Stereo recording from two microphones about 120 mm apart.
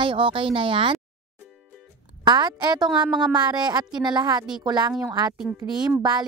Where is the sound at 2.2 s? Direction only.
35° right (ahead or behind).